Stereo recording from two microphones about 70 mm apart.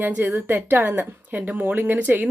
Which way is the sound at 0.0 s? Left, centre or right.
Right.